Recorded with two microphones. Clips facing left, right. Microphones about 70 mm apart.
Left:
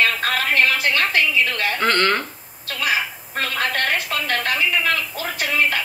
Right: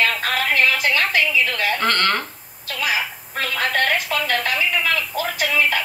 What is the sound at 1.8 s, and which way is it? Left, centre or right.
Speech, centre.